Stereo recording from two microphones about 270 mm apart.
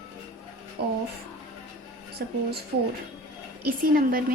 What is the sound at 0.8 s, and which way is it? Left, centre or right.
Speech, right.